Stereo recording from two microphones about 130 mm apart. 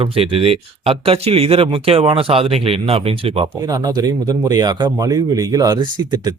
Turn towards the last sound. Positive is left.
turn(degrees=-35)  # may be behind; listen again after turning